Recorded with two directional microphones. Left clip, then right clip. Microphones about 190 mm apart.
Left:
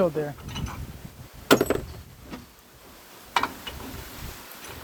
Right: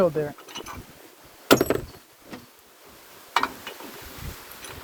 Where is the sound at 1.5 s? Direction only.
5° right (ahead or behind).